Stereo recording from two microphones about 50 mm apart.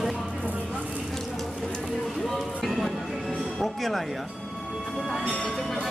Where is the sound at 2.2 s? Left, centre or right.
Centre.